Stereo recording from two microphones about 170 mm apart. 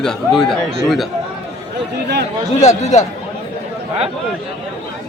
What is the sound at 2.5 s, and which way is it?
Speech, 40° left (ahead or behind).